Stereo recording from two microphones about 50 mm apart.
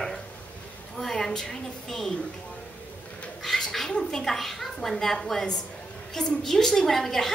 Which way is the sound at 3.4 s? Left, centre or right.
Centre.